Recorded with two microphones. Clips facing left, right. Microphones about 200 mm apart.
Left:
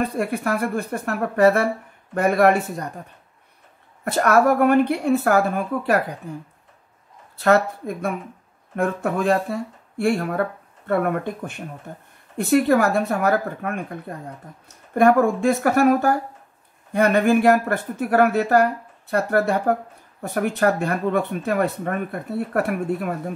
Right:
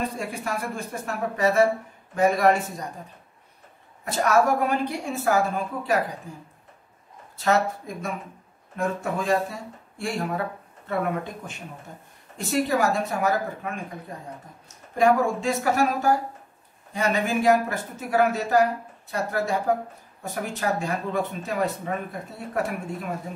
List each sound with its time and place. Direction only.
0.2 s speech: 60° left (ahead or behind)
4.0 s speech: 60° left (ahead or behind)
7.3 s speech: 60° left (ahead or behind)
15.0 s speech: 55° left (ahead or behind)